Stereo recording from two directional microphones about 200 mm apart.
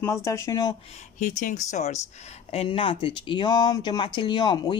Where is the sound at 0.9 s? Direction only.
40° left (ahead or behind).